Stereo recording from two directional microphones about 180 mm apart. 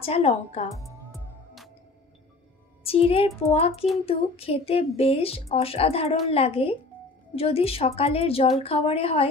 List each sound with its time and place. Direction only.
0.0 s a woman's voice: 35° left (ahead or behind)
2.8 s a woman's voice: 30° left (ahead or behind)